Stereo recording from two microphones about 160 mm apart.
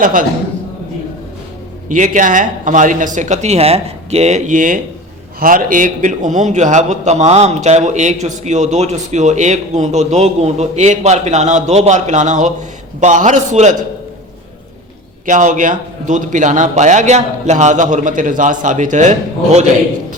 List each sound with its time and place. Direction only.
0.0 s a man's voice: 60° right (ahead or behind)
1.9 s a man's voice: 55° right (ahead or behind)
15.3 s a man's voice: 50° right (ahead or behind)